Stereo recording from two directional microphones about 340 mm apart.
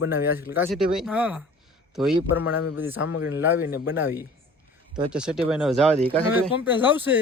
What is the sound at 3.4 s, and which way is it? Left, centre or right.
Speech, centre.